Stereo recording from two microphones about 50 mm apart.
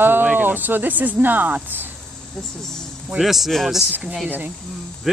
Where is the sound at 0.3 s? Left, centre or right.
Right.